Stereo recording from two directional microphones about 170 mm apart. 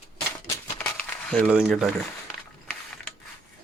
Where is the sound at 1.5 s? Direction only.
5° right (ahead or behind).